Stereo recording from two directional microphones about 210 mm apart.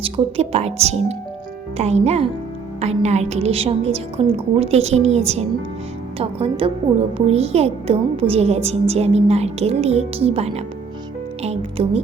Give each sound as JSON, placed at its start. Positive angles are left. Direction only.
{"t": 0.0, "sound": "a child's voice", "side_deg": -30}